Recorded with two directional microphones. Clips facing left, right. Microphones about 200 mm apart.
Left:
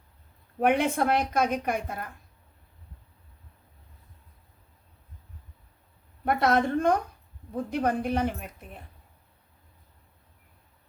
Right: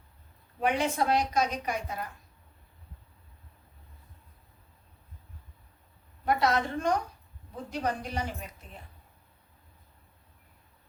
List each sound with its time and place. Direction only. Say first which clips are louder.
0.6 s a woman's voice: left 4 dB; 55° left (ahead or behind)
6.2 s a woman's voice: left 3 dB; 55° left (ahead or behind)